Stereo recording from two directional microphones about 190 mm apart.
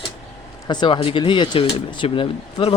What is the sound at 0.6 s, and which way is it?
Speech, 25° left (ahead or behind).